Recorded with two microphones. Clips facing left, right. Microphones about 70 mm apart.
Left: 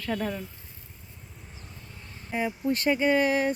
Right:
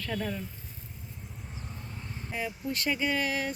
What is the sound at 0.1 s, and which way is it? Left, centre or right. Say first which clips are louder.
Speech: left 4 dB; left.